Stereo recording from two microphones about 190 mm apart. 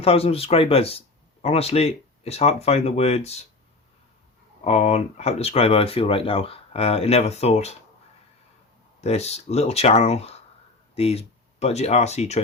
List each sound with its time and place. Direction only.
0.0 s speech: 30° left (ahead or behind)
4.6 s speech: 35° left (ahead or behind)
9.0 s speech: 35° left (ahead or behind)